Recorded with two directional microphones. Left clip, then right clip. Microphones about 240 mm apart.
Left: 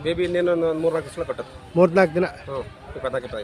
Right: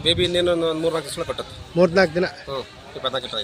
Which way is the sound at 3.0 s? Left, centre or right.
Left.